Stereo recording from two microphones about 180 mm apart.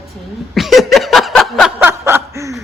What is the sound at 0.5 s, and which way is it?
Chuckle, centre (ahead or behind).